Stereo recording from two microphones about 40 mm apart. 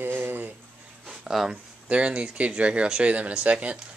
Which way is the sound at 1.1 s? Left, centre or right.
Centre.